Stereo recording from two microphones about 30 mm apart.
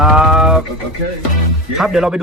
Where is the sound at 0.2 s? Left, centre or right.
Right.